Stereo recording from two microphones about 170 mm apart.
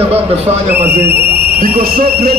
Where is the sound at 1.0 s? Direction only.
70° right (ahead or behind).